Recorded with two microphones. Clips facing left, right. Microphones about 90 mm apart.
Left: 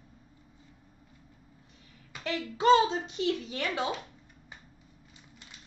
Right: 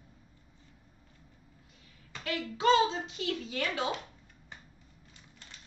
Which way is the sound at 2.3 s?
25° left (ahead or behind).